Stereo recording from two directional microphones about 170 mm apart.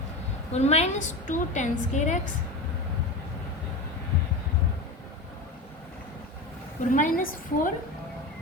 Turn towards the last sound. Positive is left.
turn(degrees=50)  # may be behind; listen again after turning